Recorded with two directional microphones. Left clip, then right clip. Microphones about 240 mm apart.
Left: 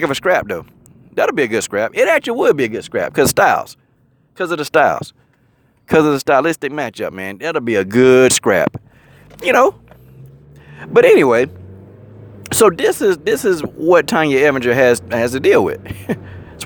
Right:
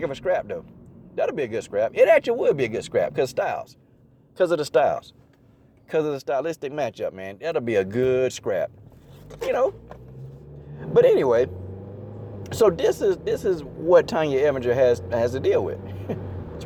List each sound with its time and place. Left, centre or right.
0.0 s speech: left